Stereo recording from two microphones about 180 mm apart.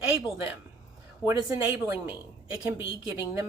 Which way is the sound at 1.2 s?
15° right (ahead or behind).